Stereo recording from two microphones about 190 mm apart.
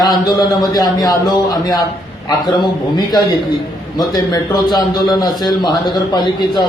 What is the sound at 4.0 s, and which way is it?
A man's voice, 20° left (ahead or behind).